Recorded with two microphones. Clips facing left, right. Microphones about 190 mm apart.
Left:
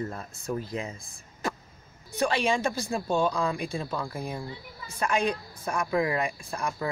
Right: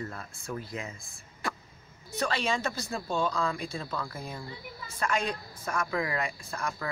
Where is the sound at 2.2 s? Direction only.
15° left (ahead or behind).